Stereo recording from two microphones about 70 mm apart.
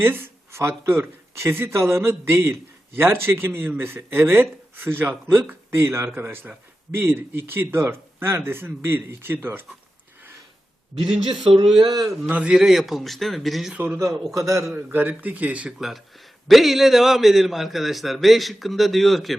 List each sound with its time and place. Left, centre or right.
0.0 s a man's voice: right
6.1 s a man's voice: right
11.0 s a man's voice: centre
12.3 s a man's voice: centre
12.5 s a man's voice: centre
13.7 s a man's voice: right
14.3 s a man's voice: right
14.8 s speech: right
15.8 s a man's voice: centre